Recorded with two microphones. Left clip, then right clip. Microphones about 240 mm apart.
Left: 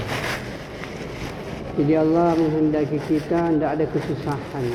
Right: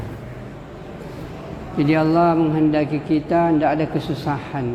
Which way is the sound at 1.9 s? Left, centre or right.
Right.